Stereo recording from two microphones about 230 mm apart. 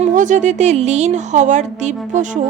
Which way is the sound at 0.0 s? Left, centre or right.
Right.